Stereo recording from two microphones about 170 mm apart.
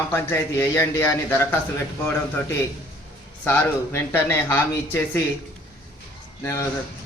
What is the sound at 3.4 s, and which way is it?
Speech, 15° left (ahead or behind).